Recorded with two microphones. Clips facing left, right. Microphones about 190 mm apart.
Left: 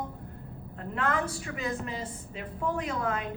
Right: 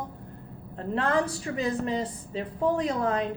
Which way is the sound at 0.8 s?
35° right (ahead or behind).